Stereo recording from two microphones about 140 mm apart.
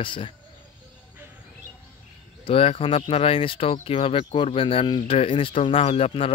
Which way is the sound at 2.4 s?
45° left (ahead or behind).